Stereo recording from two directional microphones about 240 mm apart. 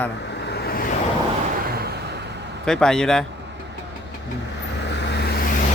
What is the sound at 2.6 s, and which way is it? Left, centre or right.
Speech, centre.